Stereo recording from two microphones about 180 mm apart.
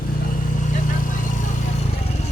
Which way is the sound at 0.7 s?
45° left (ahead or behind).